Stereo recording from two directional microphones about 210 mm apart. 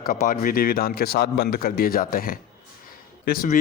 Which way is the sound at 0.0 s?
40° left (ahead or behind).